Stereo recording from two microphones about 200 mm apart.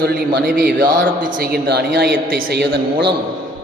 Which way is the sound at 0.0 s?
50° right (ahead or behind).